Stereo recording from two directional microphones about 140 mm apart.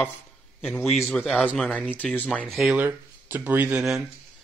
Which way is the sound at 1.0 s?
15° left (ahead or behind).